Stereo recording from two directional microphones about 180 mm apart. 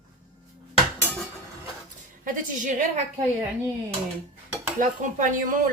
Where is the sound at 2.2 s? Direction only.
45° right (ahead or behind).